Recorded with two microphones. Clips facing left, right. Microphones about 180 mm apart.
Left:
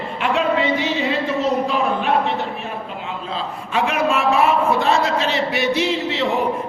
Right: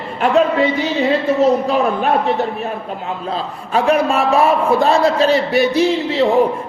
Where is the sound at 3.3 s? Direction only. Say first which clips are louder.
Right 4 dB; 40° right (ahead or behind).